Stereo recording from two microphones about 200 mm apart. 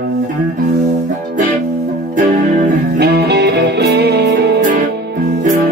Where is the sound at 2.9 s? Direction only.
55° right (ahead or behind).